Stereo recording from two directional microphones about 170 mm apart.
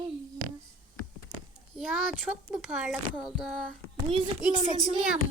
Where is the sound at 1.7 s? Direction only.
Centre (ahead or behind).